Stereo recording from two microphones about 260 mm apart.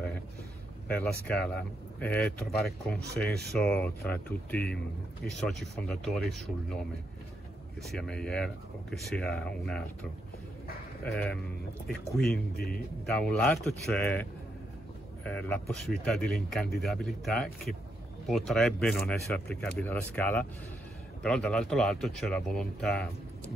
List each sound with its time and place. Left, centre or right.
1.2 s speech: centre
7.8 s speech: centre
12.3 s speech: left
13.1 s speech: centre
15.2 s speech: centre